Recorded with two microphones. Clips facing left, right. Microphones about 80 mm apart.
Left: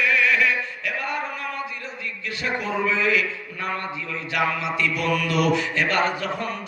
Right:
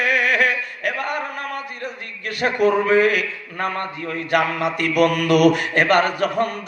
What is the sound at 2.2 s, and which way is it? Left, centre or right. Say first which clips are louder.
A man's voice: right 10 dB; right.